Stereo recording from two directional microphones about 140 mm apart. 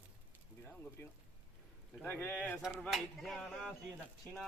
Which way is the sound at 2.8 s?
Centre (ahead or behind).